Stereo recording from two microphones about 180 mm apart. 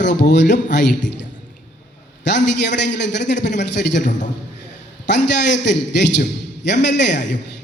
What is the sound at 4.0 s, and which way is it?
Speech, 45° left (ahead or behind).